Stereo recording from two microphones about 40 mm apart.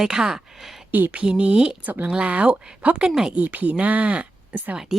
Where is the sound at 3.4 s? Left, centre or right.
Right.